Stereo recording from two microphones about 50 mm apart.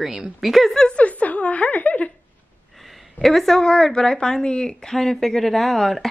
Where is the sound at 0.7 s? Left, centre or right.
Left.